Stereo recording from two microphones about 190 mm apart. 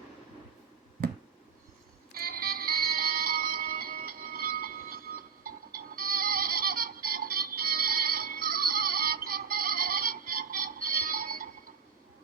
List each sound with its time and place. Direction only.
2.1 s music: 50° right (ahead or behind)